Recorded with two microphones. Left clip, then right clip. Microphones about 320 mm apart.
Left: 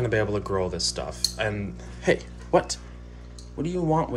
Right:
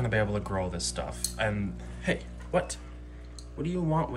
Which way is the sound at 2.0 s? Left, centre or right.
Centre.